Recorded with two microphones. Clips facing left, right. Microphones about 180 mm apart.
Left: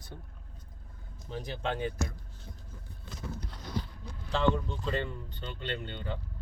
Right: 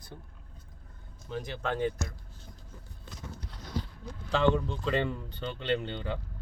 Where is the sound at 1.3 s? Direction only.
35° left (ahead or behind).